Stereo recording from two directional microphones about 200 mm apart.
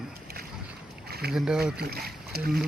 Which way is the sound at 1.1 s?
50° right (ahead or behind).